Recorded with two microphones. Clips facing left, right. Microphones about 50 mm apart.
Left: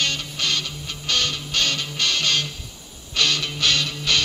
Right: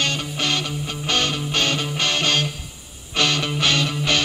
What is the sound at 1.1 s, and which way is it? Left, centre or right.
Music, right.